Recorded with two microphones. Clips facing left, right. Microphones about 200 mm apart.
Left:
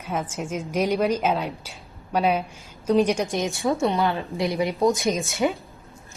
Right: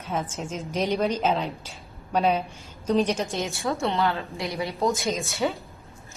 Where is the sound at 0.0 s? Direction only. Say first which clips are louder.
Left 1 dB; 10° left (ahead or behind).